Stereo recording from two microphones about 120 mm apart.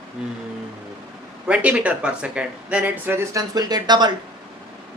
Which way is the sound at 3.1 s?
25° right (ahead or behind).